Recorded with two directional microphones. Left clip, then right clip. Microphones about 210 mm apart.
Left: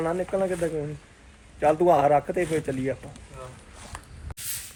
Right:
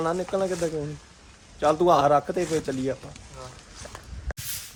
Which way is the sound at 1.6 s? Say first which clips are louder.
Even; 15° right (ahead or behind).